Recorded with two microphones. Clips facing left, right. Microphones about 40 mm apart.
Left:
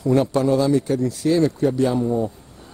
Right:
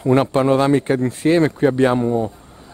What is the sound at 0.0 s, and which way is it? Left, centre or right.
Speech, right.